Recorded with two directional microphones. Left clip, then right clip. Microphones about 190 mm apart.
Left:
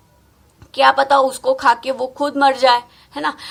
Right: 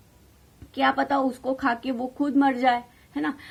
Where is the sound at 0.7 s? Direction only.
30° right (ahead or behind).